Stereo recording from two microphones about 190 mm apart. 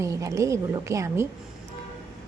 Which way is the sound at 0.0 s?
15° right (ahead or behind).